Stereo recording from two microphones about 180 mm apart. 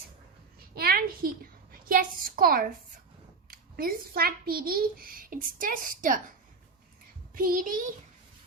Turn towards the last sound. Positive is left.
turn(degrees=-50)  # may be behind; listen again after turning